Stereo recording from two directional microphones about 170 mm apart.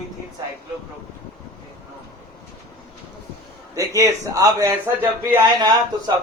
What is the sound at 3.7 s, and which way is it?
A man's voice, 20° right (ahead or behind).